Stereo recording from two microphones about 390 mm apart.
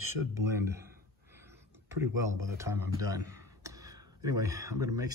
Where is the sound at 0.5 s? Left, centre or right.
Centre.